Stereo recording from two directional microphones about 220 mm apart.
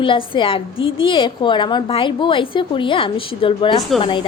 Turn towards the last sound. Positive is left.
turn(degrees=25)  # may be behind; listen again after turning